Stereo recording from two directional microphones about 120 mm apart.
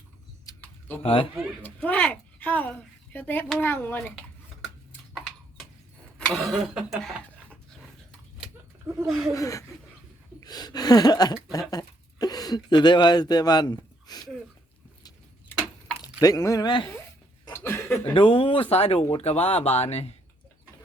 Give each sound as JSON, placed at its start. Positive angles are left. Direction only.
{"t": 0.6, "sound": "typing", "side_deg": 15}
{"t": 1.0, "sound": "speech", "side_deg": 50}
{"t": 1.6, "sound": "a woman's voice", "side_deg": 10}
{"t": 5.1, "sound": "horse", "side_deg": 0}
{"t": 6.1, "sound": "speech", "side_deg": 5}
{"t": 9.0, "sound": "speech", "side_deg": 0}
{"t": 9.3, "sound": "speech", "side_deg": 25}
{"t": 10.4, "sound": "a sound", "side_deg": 35}
{"t": 11.7, "sound": "speech", "side_deg": 35}
{"t": 16.2, "sound": "speech", "side_deg": 30}
{"t": 16.6, "sound": "speech", "side_deg": 40}
{"t": 17.5, "sound": "chuckle", "side_deg": 20}
{"t": 18.1, "sound": "speech", "side_deg": 45}